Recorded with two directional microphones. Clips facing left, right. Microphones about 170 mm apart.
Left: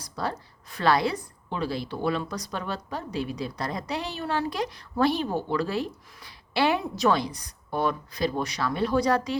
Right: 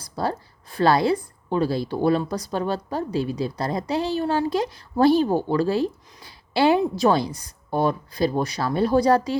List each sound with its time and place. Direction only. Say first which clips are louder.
0.0 s a woman's voice: right 5 dB; 30° right (ahead or behind)
1.5 s speech: right 7 dB; 40° right (ahead or behind)